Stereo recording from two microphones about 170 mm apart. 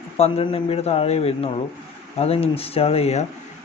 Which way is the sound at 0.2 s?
35° left (ahead or behind).